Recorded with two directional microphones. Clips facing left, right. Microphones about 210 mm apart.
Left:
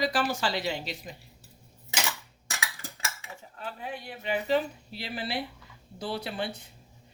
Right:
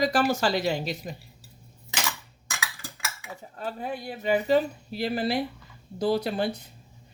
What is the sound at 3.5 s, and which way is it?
Speech, 40° right (ahead or behind).